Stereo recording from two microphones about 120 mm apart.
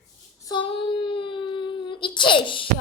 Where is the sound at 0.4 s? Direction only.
45° left (ahead or behind).